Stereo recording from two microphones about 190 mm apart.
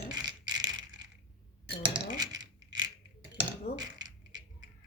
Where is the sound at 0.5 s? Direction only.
20° right (ahead or behind).